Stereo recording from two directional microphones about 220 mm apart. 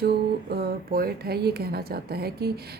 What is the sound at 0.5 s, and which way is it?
A woman's voice, 45° right (ahead or behind).